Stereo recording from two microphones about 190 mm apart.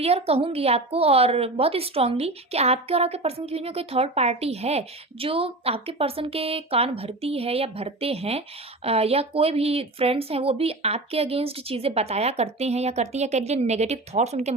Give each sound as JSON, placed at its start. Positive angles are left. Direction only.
{"t": 0.0, "sound": "a woman's voice", "side_deg": -30}